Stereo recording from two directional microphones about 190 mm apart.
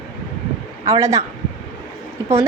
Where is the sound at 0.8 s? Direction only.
15° right (ahead or behind).